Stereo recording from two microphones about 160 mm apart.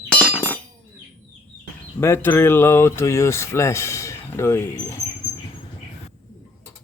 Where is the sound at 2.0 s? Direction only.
15° left (ahead or behind).